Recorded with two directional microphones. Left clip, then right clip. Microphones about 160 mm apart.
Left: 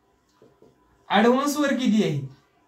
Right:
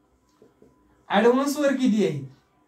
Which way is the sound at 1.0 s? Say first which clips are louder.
Even; 25° right (ahead or behind).